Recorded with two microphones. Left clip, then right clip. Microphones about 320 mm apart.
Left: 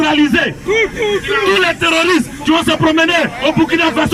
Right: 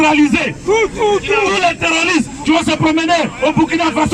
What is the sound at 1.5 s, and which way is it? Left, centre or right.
A man's voice, centre.